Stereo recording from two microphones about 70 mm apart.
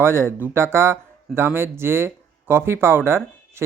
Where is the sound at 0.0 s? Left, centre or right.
Right.